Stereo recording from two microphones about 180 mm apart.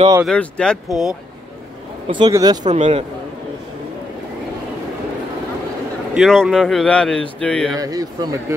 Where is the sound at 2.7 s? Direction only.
35° right (ahead or behind).